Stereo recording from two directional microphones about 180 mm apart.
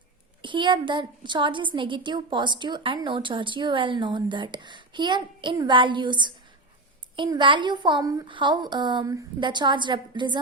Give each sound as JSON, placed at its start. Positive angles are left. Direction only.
{"t": 0.4, "sound": "a woman's voice", "side_deg": -25}